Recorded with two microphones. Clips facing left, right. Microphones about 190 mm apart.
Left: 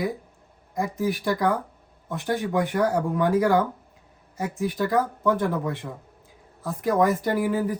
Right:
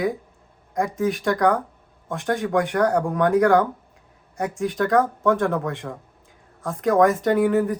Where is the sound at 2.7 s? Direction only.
65° right (ahead or behind).